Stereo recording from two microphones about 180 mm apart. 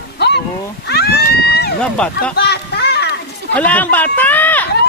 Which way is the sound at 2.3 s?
65° left (ahead or behind).